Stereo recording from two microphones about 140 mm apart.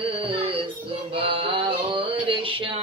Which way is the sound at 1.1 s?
40° right (ahead or behind).